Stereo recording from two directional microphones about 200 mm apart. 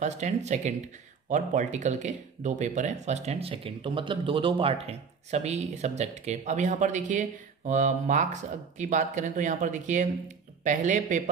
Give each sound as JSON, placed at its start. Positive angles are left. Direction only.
{"t": 0.0, "sound": "speech", "side_deg": -35}